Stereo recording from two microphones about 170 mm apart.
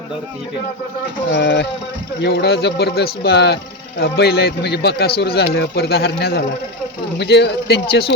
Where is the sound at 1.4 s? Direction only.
80° left.